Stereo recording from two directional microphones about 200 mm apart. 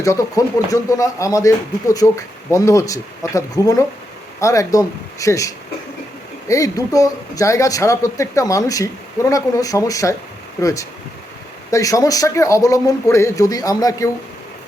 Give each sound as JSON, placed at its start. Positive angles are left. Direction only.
{"t": 0.0, "sound": "speech", "side_deg": 15}